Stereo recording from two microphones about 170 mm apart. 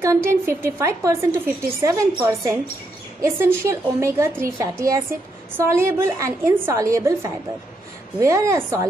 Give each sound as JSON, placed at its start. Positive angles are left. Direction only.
{"t": 0.0, "sound": "a woman's voice", "side_deg": -15}